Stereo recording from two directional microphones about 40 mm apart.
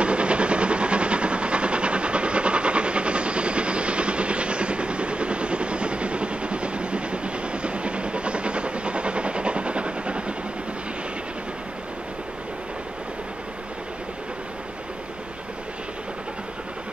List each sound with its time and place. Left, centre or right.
0.0 s vehicle: right